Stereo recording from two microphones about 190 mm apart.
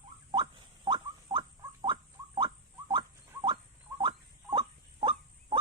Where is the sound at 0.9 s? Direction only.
25° right (ahead or behind).